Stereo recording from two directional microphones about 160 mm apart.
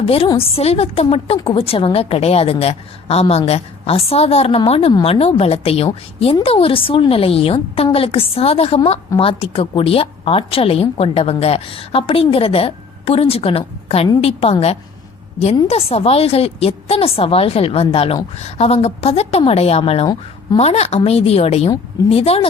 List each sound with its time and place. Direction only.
0.0 s a woman's voice: 35° left (ahead or behind)